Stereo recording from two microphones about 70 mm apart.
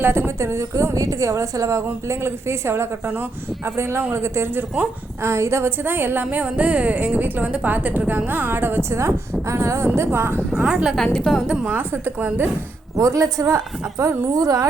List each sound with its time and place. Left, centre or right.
0.0 s a woman's voice: right
4.1 s a woman's voice: right
10.6 s speech: centre
10.9 s a woman's voice: centre
11.4 s speech: centre
11.7 s speech: right
13.0 s a woman's voice: right
14.0 s a woman's voice: right